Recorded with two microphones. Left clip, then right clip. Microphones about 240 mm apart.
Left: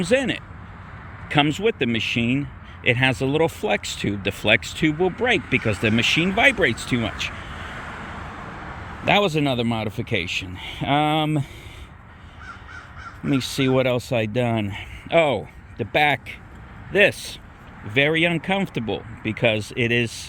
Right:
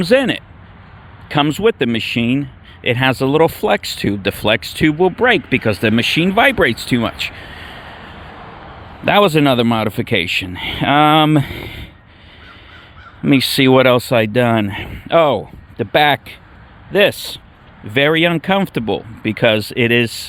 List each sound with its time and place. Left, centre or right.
0.0 s speech: right
9.0 s speech: right
13.2 s speech: right